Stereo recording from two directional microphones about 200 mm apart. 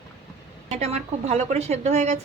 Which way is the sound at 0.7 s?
35° right (ahead or behind).